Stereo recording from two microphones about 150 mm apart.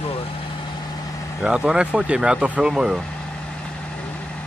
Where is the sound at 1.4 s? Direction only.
5° right (ahead or behind).